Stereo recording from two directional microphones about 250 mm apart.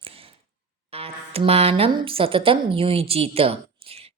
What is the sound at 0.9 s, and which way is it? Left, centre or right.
Speech, right.